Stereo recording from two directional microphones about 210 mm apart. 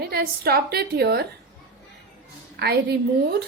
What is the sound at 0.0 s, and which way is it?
A woman's voice, 50° right (ahead or behind).